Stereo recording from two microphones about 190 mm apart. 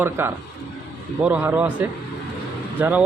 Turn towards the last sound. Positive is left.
turn(degrees=-10)  # may be behind; listen again after turning